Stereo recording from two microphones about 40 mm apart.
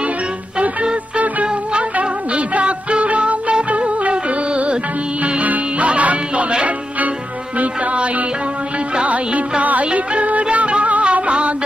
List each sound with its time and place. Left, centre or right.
0.6 s music: right
7.5 s music: right